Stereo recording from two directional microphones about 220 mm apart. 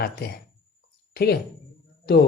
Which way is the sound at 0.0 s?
45° left (ahead or behind).